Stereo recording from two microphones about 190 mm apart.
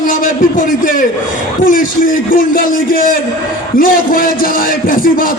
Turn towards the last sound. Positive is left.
turn(degrees=50)  # may be behind; listen again after turning